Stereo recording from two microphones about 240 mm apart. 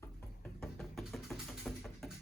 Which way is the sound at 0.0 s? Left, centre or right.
Centre.